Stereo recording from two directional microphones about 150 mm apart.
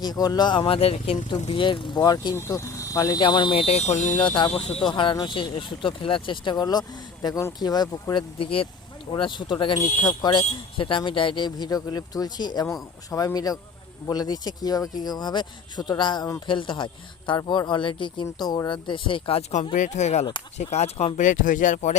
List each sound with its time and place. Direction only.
0.0 s speech: 25° left (ahead or behind); by 1.2 s 45° left (ahead or behind)
1.5 s speech: 35° left (ahead or behind); by 4.2 s 50° left (ahead or behind)
4.2 s speech: 35° left (ahead or behind); by 21.9 s 55° left (ahead or behind)